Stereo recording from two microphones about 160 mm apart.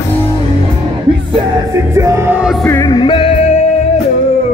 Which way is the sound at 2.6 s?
15° left (ahead or behind).